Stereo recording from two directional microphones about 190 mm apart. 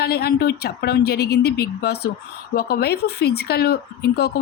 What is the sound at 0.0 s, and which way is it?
Speech, 55° left (ahead or behind).